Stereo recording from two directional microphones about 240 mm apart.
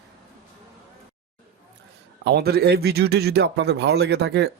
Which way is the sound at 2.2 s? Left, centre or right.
Right.